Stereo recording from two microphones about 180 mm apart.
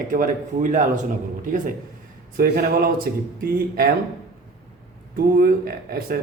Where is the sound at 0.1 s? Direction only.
50° right (ahead or behind).